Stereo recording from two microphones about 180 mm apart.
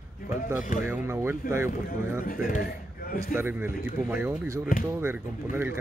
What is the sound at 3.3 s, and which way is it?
Speech, 10° right (ahead or behind).